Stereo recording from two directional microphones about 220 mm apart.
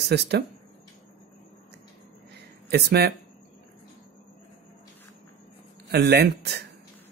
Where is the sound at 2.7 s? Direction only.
50° right (ahead or behind).